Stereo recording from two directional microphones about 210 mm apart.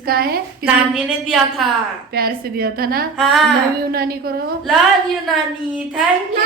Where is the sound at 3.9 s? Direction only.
45° right (ahead or behind).